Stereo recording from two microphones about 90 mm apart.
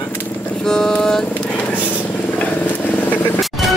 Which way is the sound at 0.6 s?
5° left (ahead or behind).